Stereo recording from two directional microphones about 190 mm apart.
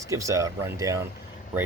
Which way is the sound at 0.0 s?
15° right (ahead or behind).